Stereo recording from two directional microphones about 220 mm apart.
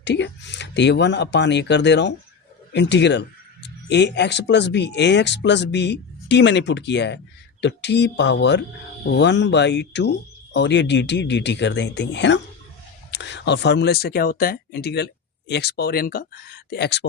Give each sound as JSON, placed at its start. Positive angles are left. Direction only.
{"t": 0.0, "sound": "speech", "side_deg": 50}